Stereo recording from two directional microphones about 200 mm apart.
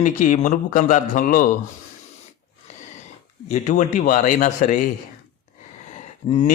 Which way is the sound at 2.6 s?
35° left (ahead or behind).